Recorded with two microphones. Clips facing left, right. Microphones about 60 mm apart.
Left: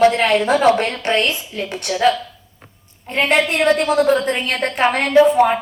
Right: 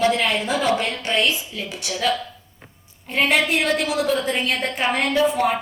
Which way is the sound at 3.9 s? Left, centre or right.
Left.